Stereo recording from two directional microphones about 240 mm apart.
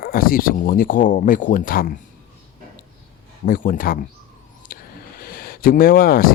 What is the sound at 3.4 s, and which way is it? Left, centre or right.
Speech, left.